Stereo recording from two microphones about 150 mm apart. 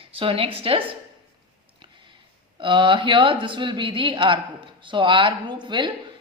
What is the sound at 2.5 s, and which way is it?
A woman's voice, 35° right (ahead or behind).